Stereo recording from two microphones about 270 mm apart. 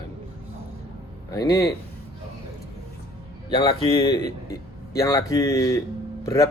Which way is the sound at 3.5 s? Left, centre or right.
Centre.